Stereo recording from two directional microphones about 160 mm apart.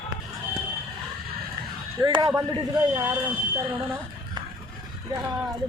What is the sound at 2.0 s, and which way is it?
Speech, 25° right (ahead or behind).